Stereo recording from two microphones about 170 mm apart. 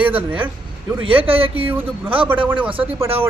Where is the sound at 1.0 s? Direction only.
30° right (ahead or behind).